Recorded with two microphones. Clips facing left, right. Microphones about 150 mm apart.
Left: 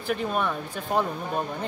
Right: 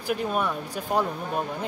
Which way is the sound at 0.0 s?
5° right (ahead or behind).